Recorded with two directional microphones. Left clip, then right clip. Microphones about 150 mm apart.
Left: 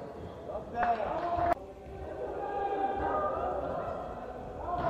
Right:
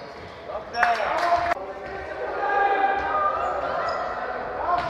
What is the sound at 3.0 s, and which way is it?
Basketball bounce, 20° right (ahead or behind).